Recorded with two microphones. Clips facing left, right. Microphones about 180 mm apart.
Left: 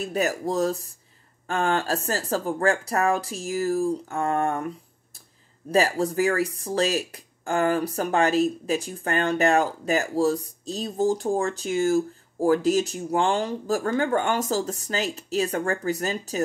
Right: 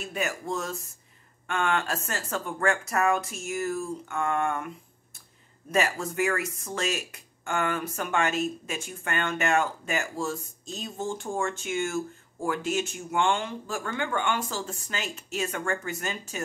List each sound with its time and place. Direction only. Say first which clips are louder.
0.0 s speech: left 7 dB; 40° left (ahead or behind)